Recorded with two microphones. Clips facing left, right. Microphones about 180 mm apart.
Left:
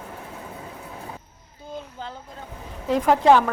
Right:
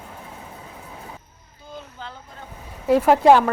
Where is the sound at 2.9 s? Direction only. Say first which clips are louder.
Right 3 dB; 10° right (ahead or behind).